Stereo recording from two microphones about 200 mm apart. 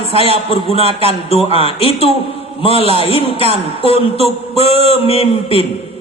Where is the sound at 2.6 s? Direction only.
30° left (ahead or behind).